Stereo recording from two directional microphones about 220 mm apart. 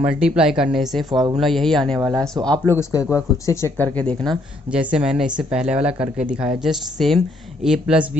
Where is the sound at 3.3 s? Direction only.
15° left (ahead or behind).